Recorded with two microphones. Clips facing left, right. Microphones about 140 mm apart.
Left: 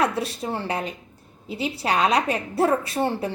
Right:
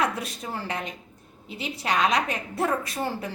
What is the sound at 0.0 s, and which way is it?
A woman's voice, 30° left (ahead or behind).